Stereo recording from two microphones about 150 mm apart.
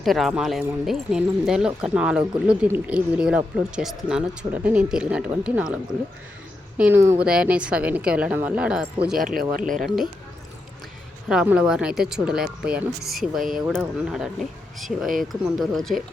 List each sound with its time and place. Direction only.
0.0 s a woman's voice: centre (ahead or behind)
9.1 s speech: 70° right (ahead or behind)
11.3 s speech: 5° right (ahead or behind)